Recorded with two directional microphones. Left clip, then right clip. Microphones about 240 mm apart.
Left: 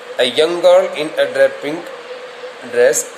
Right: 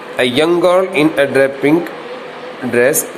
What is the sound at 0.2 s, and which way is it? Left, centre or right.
A man's voice, centre.